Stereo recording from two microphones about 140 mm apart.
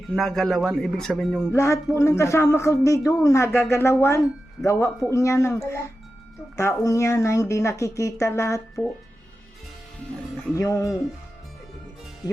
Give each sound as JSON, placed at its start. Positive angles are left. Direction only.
{"t": 0.2, "sound": "a man's voice", "side_deg": 0}
{"t": 1.5, "sound": "speech", "side_deg": 20}
{"t": 10.5, "sound": "speech", "side_deg": 25}